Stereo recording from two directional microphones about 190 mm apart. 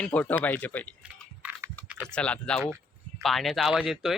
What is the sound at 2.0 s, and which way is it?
Speech, 5° left (ahead or behind).